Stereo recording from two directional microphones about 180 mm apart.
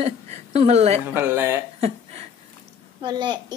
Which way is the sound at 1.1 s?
10° right (ahead or behind).